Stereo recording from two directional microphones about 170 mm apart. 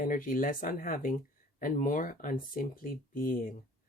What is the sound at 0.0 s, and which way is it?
Speech, 55° left (ahead or behind).